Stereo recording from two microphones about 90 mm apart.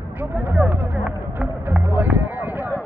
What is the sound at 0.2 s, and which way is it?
Music, 15° right (ahead or behind).